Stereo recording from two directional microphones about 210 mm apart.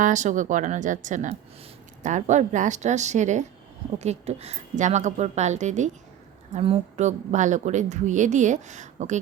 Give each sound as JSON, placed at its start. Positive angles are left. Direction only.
{"t": 0.0, "sound": "a woman's voice", "side_deg": -35}